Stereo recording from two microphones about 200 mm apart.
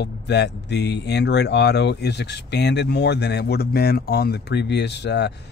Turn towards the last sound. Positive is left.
turn(degrees=60)  # may be behind; listen again after turning